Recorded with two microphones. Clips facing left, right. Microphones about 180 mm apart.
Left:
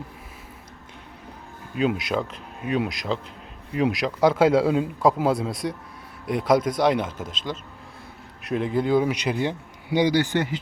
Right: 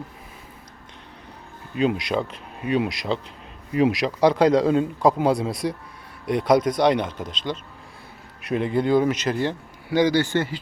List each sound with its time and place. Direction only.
1.7 s a man's voice: centre (ahead or behind)
9.1 s a man's voice: 15° left (ahead or behind)